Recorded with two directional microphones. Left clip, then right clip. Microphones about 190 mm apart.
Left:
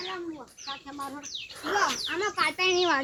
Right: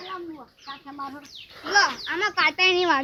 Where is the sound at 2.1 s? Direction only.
25° right (ahead or behind).